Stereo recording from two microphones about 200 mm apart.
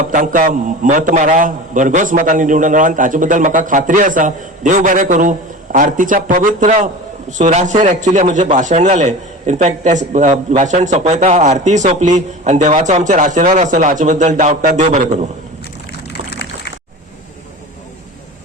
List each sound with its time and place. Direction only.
0.1 s a man's voice: 40° right (ahead or behind)